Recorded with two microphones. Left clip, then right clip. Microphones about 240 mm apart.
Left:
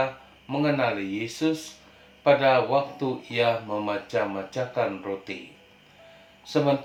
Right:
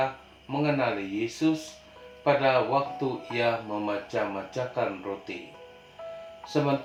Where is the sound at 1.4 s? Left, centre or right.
Left.